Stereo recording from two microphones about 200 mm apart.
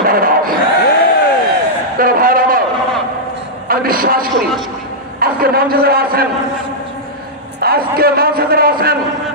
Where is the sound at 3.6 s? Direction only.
45° right (ahead or behind).